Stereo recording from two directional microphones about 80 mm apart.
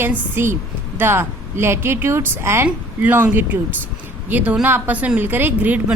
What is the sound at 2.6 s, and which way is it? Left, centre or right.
A woman's voice, right.